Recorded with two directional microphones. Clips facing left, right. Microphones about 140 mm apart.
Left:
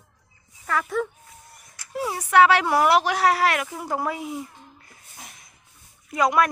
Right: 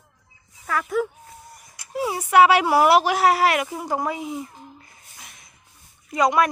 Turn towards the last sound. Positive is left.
turn(degrees=5)  # may be behind; listen again after turning